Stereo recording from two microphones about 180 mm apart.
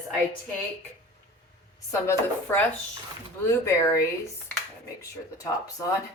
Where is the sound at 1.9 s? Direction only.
15° left (ahead or behind).